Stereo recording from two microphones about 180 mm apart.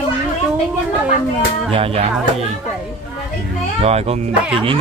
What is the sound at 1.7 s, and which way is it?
Speech, 35° right (ahead or behind).